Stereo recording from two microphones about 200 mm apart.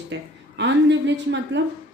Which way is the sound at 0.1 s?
65° right (ahead or behind).